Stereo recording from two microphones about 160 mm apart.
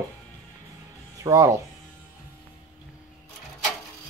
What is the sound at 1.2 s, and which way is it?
Speech, 20° right (ahead or behind).